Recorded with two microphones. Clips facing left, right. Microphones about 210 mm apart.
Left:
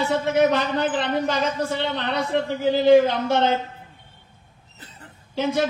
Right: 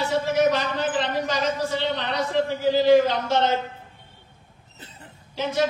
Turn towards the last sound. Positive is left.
turn(degrees=55)  # may be behind; listen again after turning